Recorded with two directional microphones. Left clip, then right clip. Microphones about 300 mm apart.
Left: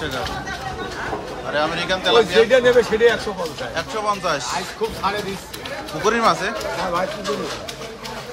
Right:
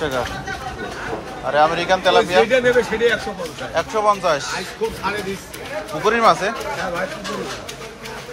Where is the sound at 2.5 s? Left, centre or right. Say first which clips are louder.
Left 2 dB; centre.